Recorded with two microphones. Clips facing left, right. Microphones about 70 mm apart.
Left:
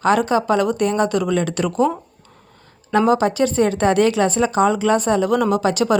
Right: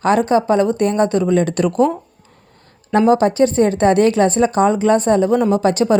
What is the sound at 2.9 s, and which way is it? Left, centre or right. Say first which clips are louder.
A woman's voice: right 3 dB; right.